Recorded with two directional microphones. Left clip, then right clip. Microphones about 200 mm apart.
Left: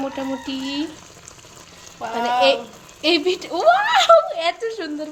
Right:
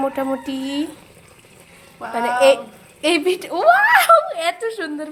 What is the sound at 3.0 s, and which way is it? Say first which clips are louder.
A woman's voice: right 1 dB; 5° right (ahead or behind).